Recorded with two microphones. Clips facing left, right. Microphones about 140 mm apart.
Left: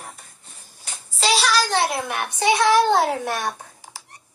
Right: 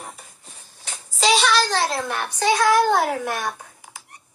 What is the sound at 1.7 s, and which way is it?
A child's voice, 15° left (ahead or behind).